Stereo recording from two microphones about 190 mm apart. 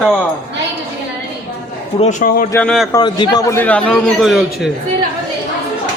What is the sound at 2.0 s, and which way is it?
Speech, 45° left (ahead or behind).